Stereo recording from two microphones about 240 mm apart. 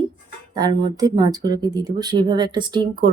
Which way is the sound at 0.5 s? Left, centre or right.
Centre.